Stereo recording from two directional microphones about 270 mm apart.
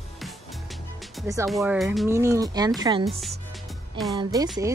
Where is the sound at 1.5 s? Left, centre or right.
Centre.